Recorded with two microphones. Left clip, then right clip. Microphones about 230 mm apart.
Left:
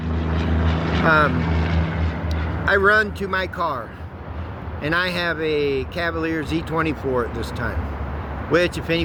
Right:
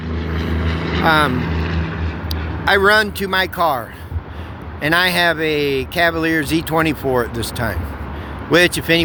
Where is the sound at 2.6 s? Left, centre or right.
Right.